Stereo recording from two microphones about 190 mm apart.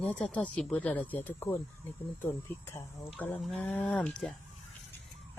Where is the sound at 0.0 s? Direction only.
5° left (ahead or behind).